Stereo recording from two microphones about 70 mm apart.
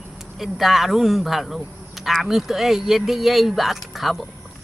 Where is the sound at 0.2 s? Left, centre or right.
Centre.